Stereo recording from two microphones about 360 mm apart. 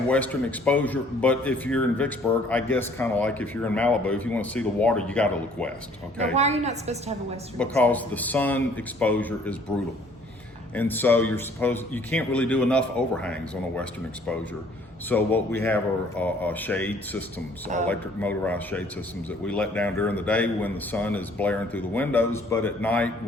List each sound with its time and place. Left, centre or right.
0.1 s a man's voice: centre
6.3 s a woman's voice: centre
7.6 s a man's voice: centre
10.8 s a man's voice: centre
15.1 s a man's voice: centre